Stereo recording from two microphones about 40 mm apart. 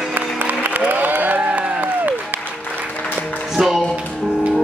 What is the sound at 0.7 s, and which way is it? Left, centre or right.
Applause, right.